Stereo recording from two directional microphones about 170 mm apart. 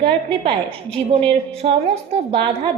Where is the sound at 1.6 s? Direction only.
35° right (ahead or behind).